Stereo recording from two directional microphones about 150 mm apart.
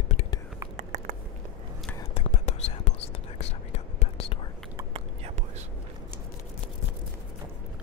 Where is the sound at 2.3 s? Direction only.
50° left (ahead or behind).